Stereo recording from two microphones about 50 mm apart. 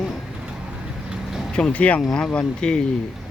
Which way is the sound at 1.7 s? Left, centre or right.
Left.